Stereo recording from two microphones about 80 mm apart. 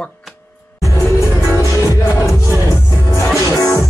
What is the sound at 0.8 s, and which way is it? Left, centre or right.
Music, left.